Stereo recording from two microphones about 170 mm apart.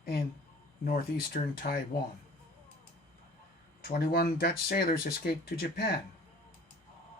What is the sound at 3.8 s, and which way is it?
Speech, 60° left (ahead or behind).